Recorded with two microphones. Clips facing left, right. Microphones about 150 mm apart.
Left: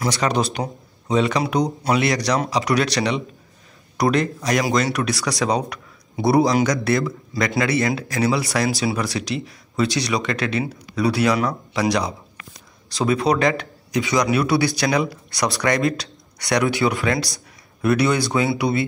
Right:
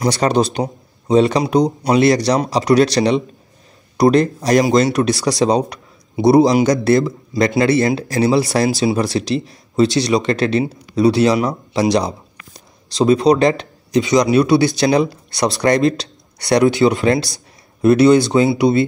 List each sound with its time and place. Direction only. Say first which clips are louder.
0.1 s a man's voice: right 5 dB; 30° right (ahead or behind)
4.6 s speech: right 7 dB; 25° right (ahead or behind)